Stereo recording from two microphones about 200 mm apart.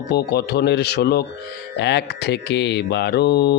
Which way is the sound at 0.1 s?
55° left (ahead or behind).